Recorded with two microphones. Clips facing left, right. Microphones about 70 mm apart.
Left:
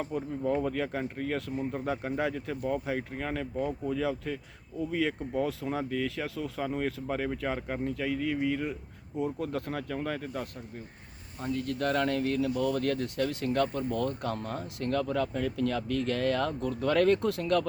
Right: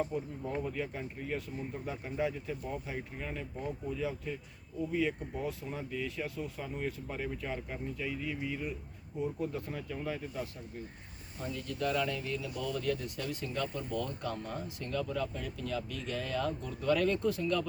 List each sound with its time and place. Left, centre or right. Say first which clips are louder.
0.0 s speech: left 4 dB; left
9.1 s speech: left 4 dB; left
11.3 s speech: left 6 dB; left